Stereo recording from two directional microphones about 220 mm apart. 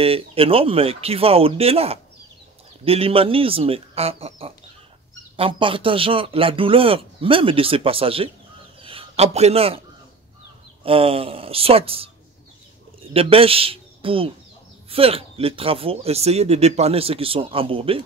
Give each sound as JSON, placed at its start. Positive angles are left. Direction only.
{"t": 0.0, "sound": "speech", "side_deg": -25}
{"t": 8.8, "sound": "a sound", "side_deg": -25}
{"t": 10.8, "sound": "speech", "side_deg": -25}
{"t": 13.1, "sound": "a man's voice", "side_deg": -25}